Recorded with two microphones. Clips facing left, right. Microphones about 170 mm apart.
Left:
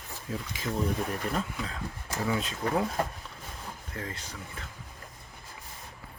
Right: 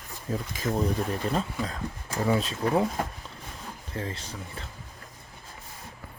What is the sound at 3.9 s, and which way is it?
Speech, 30° right (ahead or behind).